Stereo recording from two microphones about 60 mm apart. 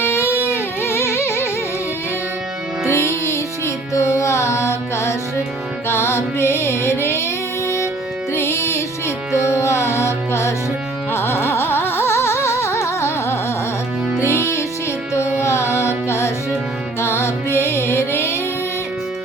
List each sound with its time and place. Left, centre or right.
0.0 s music: left
2.9 s music: left
8.3 s music: left
11.1 s carnatic music: left
14.2 s music: left